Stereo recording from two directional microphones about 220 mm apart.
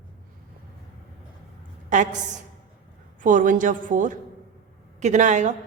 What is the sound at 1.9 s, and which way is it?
A woman's voice, 35° right (ahead or behind).